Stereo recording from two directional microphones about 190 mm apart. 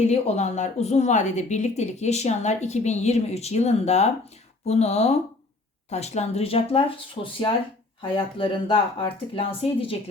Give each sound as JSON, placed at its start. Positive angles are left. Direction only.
{"t": 0.0, "sound": "speech", "side_deg": 35}